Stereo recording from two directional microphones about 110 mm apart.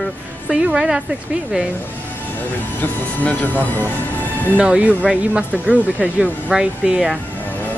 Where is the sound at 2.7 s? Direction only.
15° left (ahead or behind).